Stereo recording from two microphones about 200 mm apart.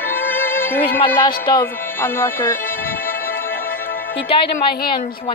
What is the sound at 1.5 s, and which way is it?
Speech, 15° left (ahead or behind).